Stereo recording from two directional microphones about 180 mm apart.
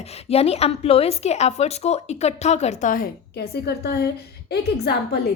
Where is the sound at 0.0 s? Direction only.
35° left (ahead or behind).